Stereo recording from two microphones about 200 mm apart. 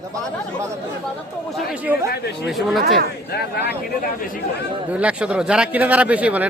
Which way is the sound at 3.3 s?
55° left (ahead or behind).